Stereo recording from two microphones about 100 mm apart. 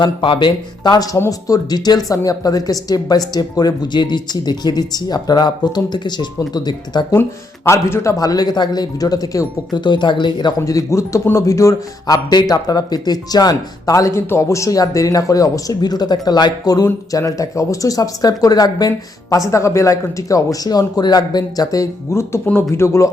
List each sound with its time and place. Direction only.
0.0 s a man's voice: 55° left (ahead or behind)
7.7 s speech: 25° left (ahead or behind)
9.7 s a man's voice: 50° left (ahead or behind)
10.7 s speech: 35° left (ahead or behind)